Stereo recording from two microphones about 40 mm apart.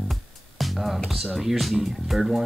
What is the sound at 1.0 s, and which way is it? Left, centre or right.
Speech, centre.